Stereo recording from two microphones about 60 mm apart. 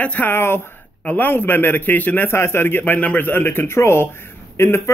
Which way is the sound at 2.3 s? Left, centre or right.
Left.